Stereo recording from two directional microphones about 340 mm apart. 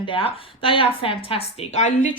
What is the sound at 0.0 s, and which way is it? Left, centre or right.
A woman's voice, centre.